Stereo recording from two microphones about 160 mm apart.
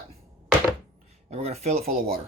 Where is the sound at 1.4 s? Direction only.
40° right (ahead or behind).